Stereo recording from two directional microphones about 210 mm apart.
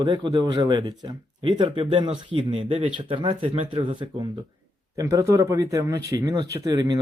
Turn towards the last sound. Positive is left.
turn(degrees=-20)  # may be behind; listen again after turning